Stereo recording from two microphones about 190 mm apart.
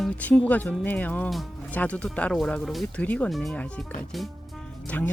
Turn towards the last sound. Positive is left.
turn(degrees=5)  # may be behind; listen again after turning